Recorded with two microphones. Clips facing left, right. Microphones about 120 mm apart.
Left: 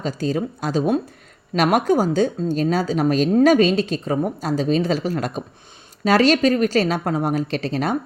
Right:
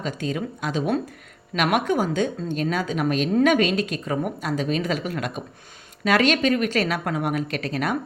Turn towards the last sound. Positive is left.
turn(degrees=30)  # may be behind; listen again after turning